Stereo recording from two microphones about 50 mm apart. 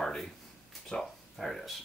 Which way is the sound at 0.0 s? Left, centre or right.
Centre.